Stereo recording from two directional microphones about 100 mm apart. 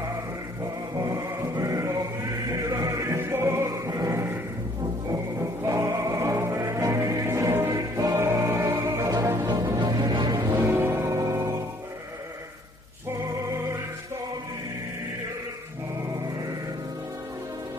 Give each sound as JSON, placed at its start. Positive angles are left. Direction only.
{"t": 1.0, "sound": "chant", "side_deg": -35}
{"t": 2.7, "sound": "music", "side_deg": -35}
{"t": 5.7, "sound": "music", "side_deg": -30}
{"t": 10.7, "sound": "music", "side_deg": -25}